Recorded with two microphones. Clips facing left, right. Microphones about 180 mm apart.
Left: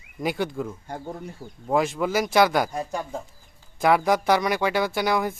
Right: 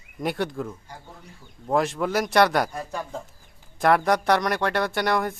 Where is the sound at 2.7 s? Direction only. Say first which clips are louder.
Left 3 dB; 20° left (ahead or behind).